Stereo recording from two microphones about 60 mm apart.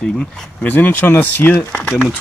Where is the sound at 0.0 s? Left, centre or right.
Centre.